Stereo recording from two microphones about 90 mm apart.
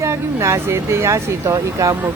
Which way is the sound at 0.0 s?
30° right (ahead or behind).